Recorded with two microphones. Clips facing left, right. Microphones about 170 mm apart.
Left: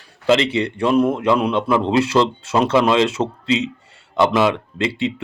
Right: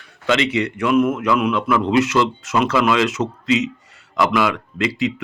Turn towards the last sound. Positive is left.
turn(degrees=30)  # may be behind; listen again after turning